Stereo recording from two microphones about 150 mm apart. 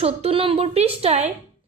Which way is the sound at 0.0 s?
40° right (ahead or behind).